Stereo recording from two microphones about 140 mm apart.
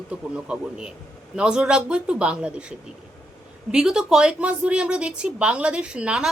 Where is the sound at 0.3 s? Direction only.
5° right (ahead or behind).